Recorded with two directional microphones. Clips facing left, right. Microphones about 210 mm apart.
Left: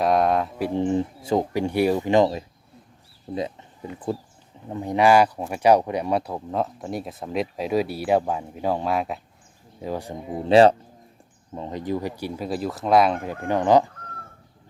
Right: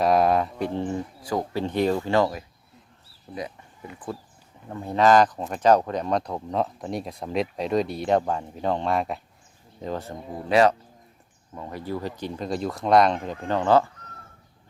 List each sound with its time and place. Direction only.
0.0 s speech: centre (ahead or behind); by 0.9 s 15° left (ahead or behind)
0.9 s speech: 25° left (ahead or behind)
1.6 s speech: 10° left (ahead or behind)
10.5 s speech: 30° left (ahead or behind)